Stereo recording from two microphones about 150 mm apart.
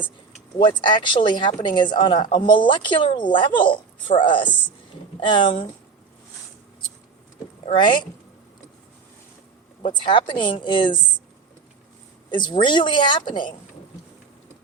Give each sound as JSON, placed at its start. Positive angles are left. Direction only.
{"t": 0.6, "sound": "speech", "side_deg": 30}
{"t": 7.7, "sound": "speech", "side_deg": 30}
{"t": 10.1, "sound": "speech", "side_deg": 35}
{"t": 12.3, "sound": "speech", "side_deg": 30}